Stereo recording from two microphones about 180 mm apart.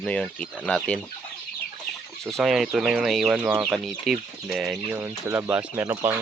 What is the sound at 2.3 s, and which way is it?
Speech, centre (ahead or behind).